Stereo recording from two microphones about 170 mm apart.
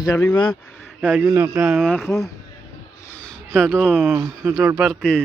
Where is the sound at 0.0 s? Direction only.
20° left (ahead or behind).